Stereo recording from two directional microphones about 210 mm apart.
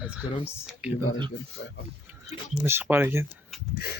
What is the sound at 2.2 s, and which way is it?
Speech, 10° right (ahead or behind).